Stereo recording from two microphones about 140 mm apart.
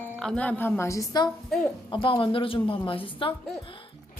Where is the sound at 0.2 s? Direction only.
5° left (ahead or behind).